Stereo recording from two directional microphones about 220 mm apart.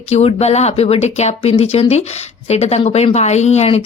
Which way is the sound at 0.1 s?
30° left (ahead or behind).